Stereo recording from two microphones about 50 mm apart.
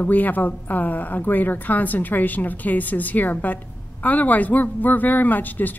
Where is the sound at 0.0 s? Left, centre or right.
Left.